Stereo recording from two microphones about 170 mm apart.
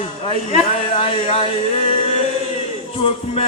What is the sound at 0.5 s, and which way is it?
Male singing, 35° left (ahead or behind).